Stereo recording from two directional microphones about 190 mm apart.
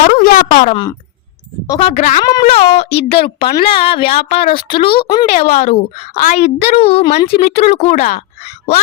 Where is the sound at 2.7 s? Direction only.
30° left (ahead or behind).